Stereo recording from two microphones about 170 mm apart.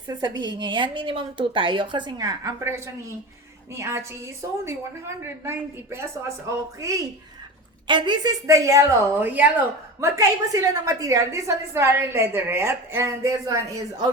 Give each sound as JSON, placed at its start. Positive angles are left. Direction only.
{"t": 0.1, "sound": "a woman's voice", "side_deg": -25}